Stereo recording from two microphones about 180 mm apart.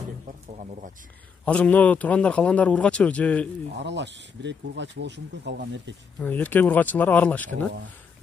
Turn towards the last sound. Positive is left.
turn(degrees=10)  # may be behind; listen again after turning